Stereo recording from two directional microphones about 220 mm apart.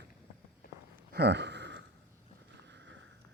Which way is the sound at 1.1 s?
50° right (ahead or behind).